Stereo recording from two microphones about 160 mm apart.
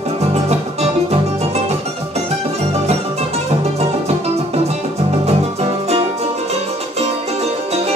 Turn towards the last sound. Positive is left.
turn(degrees=-40)  # may be behind; listen again after turning